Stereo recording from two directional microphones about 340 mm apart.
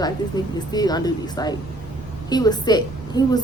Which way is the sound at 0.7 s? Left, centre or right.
Centre.